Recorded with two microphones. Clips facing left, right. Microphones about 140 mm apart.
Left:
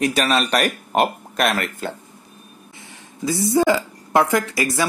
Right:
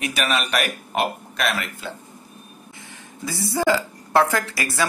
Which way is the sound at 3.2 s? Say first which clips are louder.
Left 4 dB; 25° left (ahead or behind).